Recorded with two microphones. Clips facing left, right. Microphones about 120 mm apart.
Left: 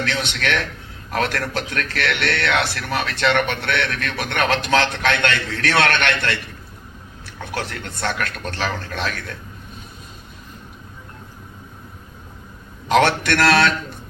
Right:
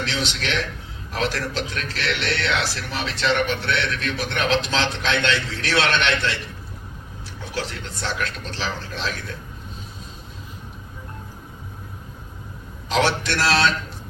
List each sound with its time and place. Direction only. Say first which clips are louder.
0.0 s a man's voice: left 3 dB; 55° left (ahead or behind)
12.9 s a man's voice: left 5 dB; 55° left (ahead or behind)